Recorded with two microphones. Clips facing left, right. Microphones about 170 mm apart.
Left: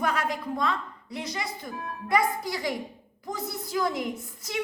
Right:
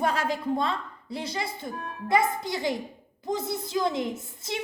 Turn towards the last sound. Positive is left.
turn(degrees=-25)  # may be behind; listen again after turning